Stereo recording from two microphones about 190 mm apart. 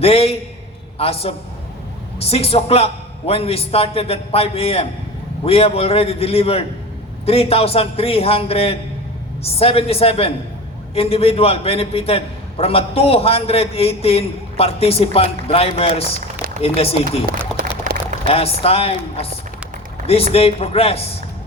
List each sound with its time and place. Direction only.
0.0 s a man's voice: 30° left (ahead or behind)
17.9 s a sound: 45° right (ahead or behind)
18.3 s a man's voice: 30° left (ahead or behind)